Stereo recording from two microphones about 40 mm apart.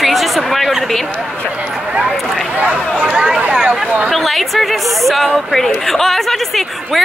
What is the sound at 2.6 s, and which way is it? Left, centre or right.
Speech, right.